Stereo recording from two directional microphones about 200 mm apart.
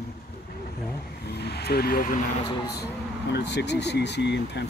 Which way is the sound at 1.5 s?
55° left (ahead or behind).